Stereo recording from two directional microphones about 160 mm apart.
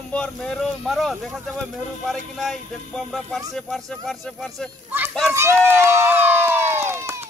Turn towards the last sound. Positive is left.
turn(degrees=-15)  # may be behind; listen again after turning